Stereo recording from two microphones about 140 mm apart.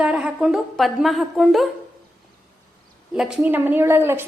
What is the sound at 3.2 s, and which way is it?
A woman's voice, 5° right (ahead or behind).